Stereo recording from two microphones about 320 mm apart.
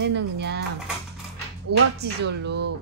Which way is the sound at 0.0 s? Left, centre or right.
Right.